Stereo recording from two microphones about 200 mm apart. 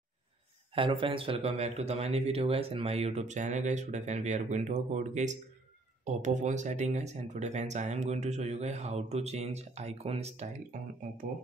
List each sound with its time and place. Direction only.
0.7 s speech: 25° right (ahead or behind)